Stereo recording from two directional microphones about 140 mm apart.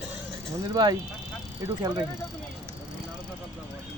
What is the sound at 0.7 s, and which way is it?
Speech, 30° right (ahead or behind).